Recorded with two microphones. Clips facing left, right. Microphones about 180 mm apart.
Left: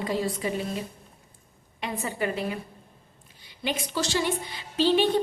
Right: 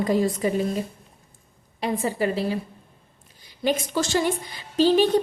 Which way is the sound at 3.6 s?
45° right (ahead or behind).